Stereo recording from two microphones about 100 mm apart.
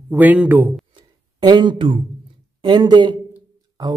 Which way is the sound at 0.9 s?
50° right (ahead or behind).